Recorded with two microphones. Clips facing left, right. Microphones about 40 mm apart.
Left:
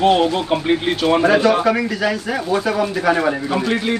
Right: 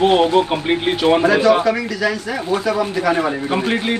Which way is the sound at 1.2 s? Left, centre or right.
Centre.